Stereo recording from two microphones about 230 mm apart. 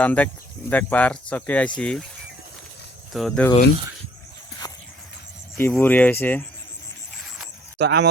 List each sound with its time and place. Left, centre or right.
0.0 s speech: centre
3.1 s speech: centre
4.6 s clip-clop: centre
5.5 s speech: centre
7.8 s speech: right